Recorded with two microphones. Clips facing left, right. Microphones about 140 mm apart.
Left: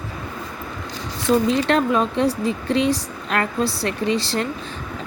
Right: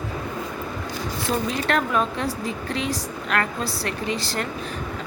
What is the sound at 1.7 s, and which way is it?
Speech, 25° left (ahead or behind).